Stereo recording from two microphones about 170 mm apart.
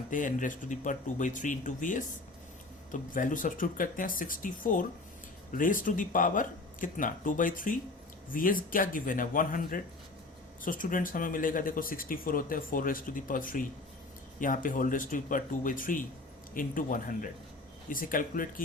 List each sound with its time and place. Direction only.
0.1 s speech: 50° left (ahead or behind)